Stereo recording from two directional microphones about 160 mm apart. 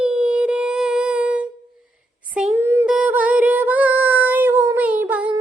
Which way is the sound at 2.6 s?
15° right (ahead or behind).